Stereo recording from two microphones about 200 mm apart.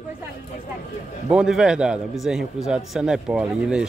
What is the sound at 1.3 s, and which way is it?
A man's voice, 5° right (ahead or behind).